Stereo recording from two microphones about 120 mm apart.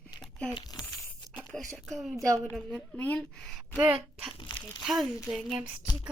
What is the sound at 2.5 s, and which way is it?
Speech, centre (ahead or behind).